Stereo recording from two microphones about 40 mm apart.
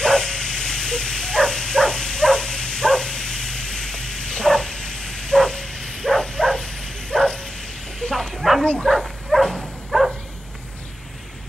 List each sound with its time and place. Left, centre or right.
0.0 s dog: centre
8.2 s bow-wow: centre
8.6 s bow-wow: left
8.9 s dog: centre
9.8 s a sound: centre